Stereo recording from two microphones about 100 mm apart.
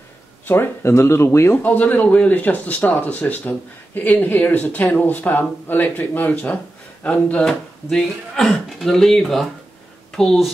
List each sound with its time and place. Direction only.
0.5 s speech: 25° left (ahead or behind); by 10.5 s centre (ahead or behind)